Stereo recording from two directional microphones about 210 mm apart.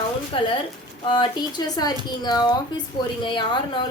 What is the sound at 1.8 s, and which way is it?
A woman's voice, 20° left (ahead or behind).